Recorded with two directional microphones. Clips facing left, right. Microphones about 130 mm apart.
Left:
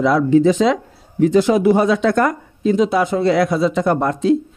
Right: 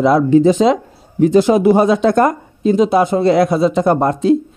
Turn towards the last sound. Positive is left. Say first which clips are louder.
# right 3 dB
turn(degrees=-40)  # may be behind; listen again after turning